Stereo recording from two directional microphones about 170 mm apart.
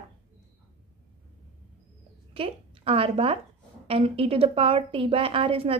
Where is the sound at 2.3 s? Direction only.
35° right (ahead or behind).